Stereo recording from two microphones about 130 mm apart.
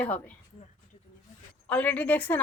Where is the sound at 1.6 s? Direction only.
10° left (ahead or behind).